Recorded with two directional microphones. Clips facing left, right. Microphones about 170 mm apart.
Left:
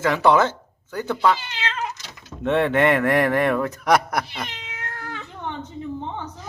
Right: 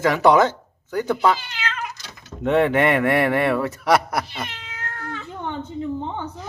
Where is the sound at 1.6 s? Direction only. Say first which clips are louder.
Left 1 dB; 30° left (ahead or behind).